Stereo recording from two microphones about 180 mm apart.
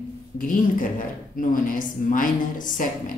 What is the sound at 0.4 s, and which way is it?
A woman's voice, 50° left (ahead or behind).